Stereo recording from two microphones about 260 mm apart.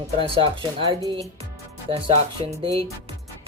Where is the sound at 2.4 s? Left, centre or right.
Right.